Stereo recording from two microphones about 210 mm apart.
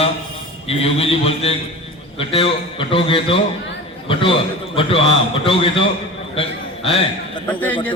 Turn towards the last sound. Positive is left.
turn(degrees=5)  # may be behind; listen again after turning